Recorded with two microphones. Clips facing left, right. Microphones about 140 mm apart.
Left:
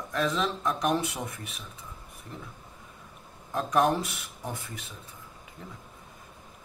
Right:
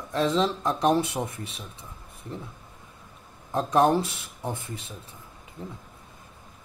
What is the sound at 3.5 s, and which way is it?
Speech, 30° right (ahead or behind).